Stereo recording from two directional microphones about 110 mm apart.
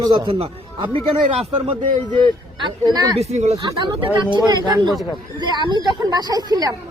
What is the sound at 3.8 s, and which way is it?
Speech, 45° right (ahead or behind).